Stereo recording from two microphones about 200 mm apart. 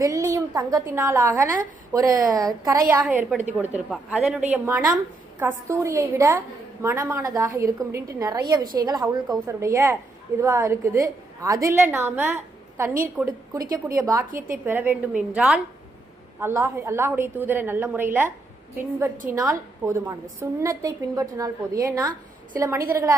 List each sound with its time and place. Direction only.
0.0 s a woman's voice: 15° right (ahead or behind)
3.0 s a woman's voice: 5° right (ahead or behind)